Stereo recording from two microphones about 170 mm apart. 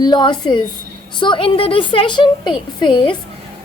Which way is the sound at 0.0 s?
25° left (ahead or behind).